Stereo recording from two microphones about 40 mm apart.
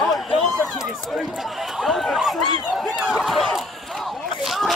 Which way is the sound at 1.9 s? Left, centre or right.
Centre.